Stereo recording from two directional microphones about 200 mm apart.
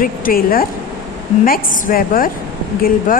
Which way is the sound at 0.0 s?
45° left (ahead or behind).